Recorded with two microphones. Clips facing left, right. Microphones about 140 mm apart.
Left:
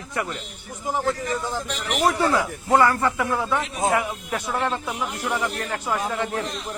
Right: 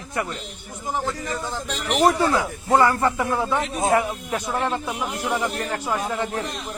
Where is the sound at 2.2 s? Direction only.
15° right (ahead or behind).